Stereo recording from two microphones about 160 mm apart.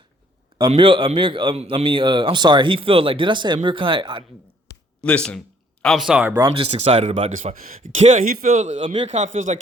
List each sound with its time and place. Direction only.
0.7 s a man's voice: 35° right (ahead or behind)
5.0 s speech: 5° left (ahead or behind); by 6.5 s 15° right (ahead or behind)
6.6 s speech: 40° right (ahead or behind)
8.8 s a man's voice: 30° right (ahead or behind)
9.0 s speech: 50° right (ahead or behind)